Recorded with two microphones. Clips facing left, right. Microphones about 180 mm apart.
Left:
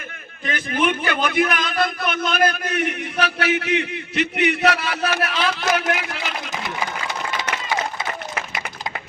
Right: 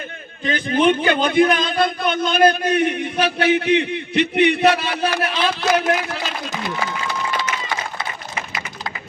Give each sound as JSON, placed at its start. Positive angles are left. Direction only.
{"t": 0.4, "sound": "a man's voice", "side_deg": -30}